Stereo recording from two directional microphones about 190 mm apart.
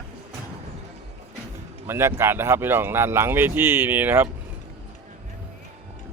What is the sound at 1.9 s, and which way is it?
Speech, 15° right (ahead or behind).